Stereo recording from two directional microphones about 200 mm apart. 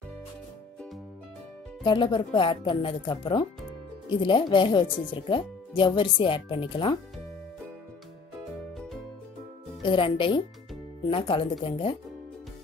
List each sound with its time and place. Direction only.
1.9 s speech: 25° left (ahead or behind)
9.8 s speech: 25° left (ahead or behind)